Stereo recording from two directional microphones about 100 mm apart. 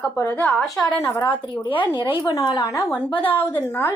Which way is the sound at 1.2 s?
50° left (ahead or behind).